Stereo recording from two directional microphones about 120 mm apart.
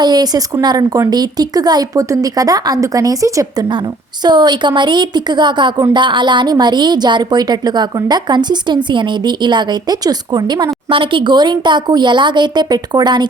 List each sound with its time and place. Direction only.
0.0 s a woman's voice: 35° right (ahead or behind)
4.2 s a woman's voice: 35° right (ahead or behind)